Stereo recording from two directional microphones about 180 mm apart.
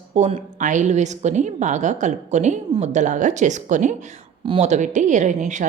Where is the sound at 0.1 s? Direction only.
35° right (ahead or behind).